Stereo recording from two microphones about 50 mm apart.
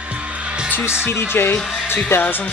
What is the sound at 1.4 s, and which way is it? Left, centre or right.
Speech, left.